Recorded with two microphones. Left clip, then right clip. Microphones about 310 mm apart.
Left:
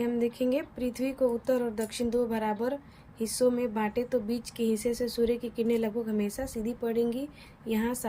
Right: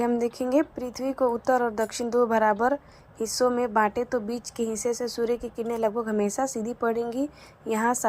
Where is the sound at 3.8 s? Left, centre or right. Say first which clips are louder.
Right 6 dB; right.